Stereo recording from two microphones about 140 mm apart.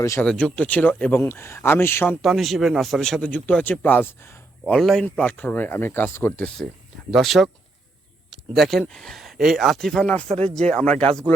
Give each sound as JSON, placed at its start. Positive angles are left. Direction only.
{"t": 0.2, "sound": "speech", "side_deg": 5}
{"t": 2.2, "sound": "speech", "side_deg": 0}
{"t": 4.7, "sound": "speech", "side_deg": 5}
{"t": 7.1, "sound": "speech", "side_deg": 0}
{"t": 8.3, "sound": "a sound", "side_deg": 0}
{"t": 8.8, "sound": "speech", "side_deg": 5}
{"t": 10.2, "sound": "speech", "side_deg": -45}
{"t": 10.5, "sound": "speech", "side_deg": 5}